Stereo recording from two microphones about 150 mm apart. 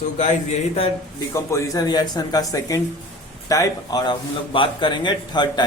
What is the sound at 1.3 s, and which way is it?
A man's voice, 20° left (ahead or behind).